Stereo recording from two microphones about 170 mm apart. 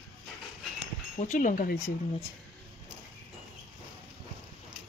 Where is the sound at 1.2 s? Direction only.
50° left (ahead or behind).